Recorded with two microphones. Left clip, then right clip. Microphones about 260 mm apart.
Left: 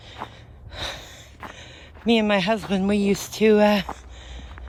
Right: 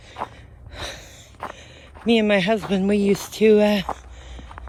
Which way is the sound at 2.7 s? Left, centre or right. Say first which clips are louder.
Right 2 dB; centre.